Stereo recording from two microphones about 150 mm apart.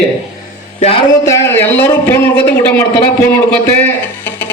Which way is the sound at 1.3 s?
15° left (ahead or behind).